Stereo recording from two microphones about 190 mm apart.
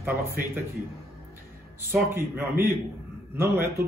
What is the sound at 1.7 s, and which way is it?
Speech, 10° right (ahead or behind).